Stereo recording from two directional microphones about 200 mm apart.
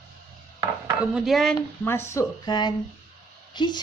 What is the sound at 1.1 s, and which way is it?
Speech, centre (ahead or behind).